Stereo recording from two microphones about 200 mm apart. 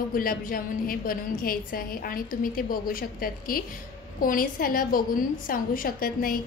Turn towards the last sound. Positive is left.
turn(degrees=45)  # may be behind; listen again after turning